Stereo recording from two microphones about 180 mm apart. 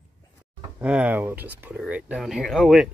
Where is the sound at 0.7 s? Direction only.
5° right (ahead or behind).